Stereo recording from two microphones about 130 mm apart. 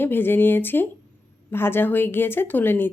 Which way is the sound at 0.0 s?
15° left (ahead or behind).